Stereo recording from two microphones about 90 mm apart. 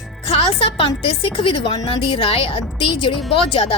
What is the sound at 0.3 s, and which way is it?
A woman's voice, 90° left.